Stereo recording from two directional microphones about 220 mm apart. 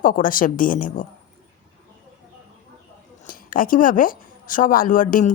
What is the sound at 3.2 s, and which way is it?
Speech, 40° left (ahead or behind).